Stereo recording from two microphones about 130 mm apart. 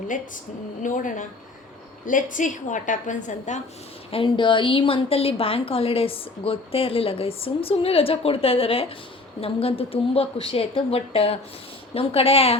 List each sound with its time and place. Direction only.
0.8 s a woman's voice: 80° left
2.0 s a woman's voice: 85° left; by 3.6 s 70° left (ahead or behind)
4.1 s a woman's voice: 40° left (ahead or behind)